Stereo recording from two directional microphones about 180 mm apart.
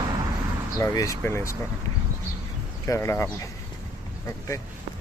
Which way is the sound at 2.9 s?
15° left (ahead or behind).